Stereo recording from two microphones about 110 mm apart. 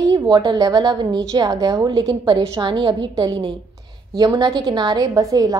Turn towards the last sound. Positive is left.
turn(degrees=-30)  # may be behind; listen again after turning